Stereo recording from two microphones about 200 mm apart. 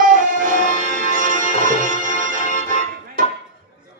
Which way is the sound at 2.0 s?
40° right (ahead or behind).